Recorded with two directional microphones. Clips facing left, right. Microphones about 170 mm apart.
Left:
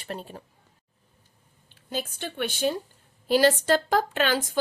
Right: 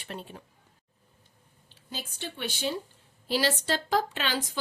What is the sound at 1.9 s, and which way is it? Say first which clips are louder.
Speech: left 7 dB; 55° left (ahead or behind).